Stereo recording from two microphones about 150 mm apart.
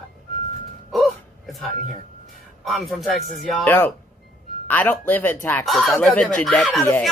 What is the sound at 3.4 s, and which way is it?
Speech, 10° left (ahead or behind).